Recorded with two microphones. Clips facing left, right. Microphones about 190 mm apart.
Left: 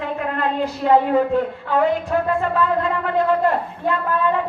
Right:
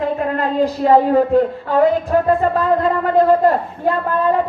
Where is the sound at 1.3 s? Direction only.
40° right (ahead or behind).